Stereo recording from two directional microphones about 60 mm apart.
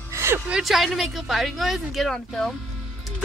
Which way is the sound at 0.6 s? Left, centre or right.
Centre.